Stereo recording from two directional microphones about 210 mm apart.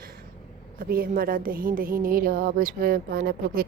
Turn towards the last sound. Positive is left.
turn(degrees=-45)  # may be behind; listen again after turning